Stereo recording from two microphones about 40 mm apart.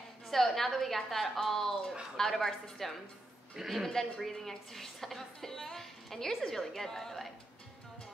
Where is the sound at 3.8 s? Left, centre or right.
Centre.